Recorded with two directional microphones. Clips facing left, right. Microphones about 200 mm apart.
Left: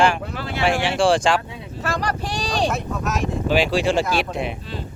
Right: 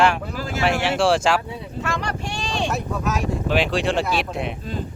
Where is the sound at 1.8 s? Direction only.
40° left (ahead or behind).